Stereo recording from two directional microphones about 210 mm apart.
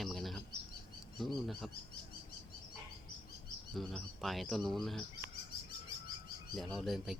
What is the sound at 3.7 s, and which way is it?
Speech, centre (ahead or behind).